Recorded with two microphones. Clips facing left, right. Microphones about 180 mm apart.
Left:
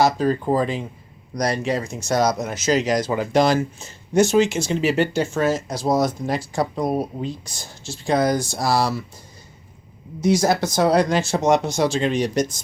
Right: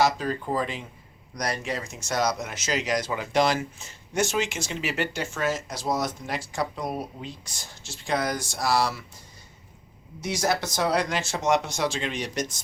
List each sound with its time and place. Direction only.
0.0 s speech: 40° left (ahead or behind)
10.2 s speech: 35° left (ahead or behind)